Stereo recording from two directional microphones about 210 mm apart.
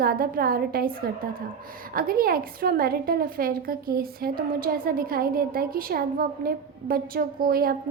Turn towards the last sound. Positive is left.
turn(degrees=-45)  # may be behind; listen again after turning